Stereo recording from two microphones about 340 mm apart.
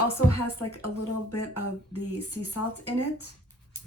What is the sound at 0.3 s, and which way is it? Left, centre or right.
Speech, left.